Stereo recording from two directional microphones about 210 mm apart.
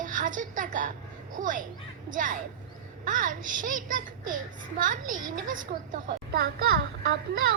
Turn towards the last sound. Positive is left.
turn(degrees=-45)  # may be behind; listen again after turning